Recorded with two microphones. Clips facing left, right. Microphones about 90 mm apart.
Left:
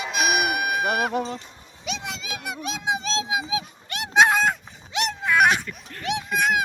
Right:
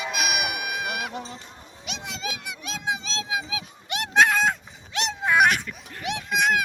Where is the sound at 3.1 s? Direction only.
20° left (ahead or behind).